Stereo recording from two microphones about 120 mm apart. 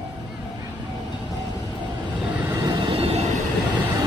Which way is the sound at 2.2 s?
10° right (ahead or behind).